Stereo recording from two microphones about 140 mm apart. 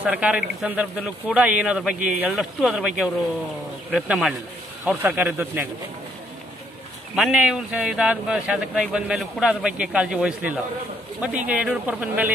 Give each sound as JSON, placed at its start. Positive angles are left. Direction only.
{"t": 0.0, "sound": "speech", "side_deg": -10}
{"t": 7.2, "sound": "speech", "side_deg": -10}